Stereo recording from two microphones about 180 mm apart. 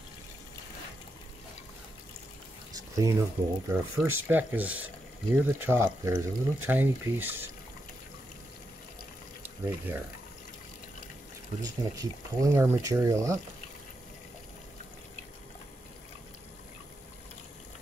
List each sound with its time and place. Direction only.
2.7 s speech: 20° right (ahead or behind)
9.9 s speech: 10° right (ahead or behind)
12.0 s speech: 15° right (ahead or behind)